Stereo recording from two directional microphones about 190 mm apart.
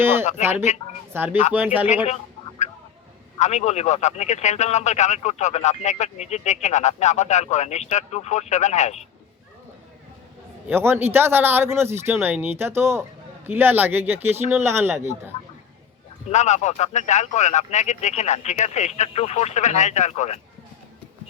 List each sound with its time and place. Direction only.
0.0 s speech: 10° right (ahead or behind)
0.7 s speech: 35° left (ahead or behind)
1.1 s speech: 10° right (ahead or behind)
3.3 s speech: 35° left (ahead or behind)
10.7 s speech: 10° right (ahead or behind)
16.2 s speech: 35° left (ahead or behind)